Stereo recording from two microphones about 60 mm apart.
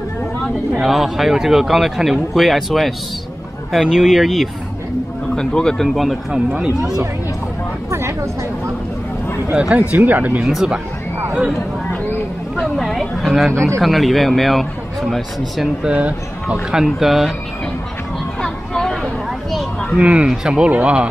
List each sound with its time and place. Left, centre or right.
0.7 s speech: centre
5.3 s speech: centre
7.9 s a sound: right
9.5 s speech: centre
9.9 s speech: right
10.4 s speech: centre
12.7 s a sound: centre
13.7 s speech: centre
15.8 s speech: centre
16.7 s speech: centre
18.4 s a sound: centre
20.0 s speech: right
20.2 s speech: centre